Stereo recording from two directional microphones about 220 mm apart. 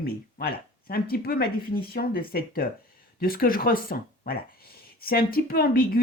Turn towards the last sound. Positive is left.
turn(degrees=40)  # may be behind; listen again after turning